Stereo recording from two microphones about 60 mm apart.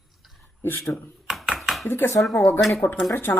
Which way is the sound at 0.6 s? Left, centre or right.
Left.